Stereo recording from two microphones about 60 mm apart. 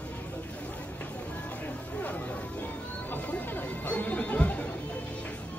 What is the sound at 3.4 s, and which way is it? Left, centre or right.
Music, left.